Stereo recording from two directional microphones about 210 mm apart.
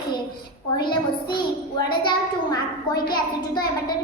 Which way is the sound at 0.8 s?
20° left (ahead or behind).